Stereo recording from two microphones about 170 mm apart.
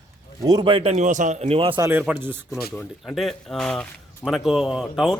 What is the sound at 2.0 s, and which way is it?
Speech, 10° right (ahead or behind).